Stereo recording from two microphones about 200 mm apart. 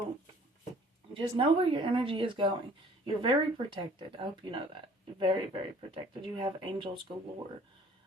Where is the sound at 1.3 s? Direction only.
25° right (ahead or behind).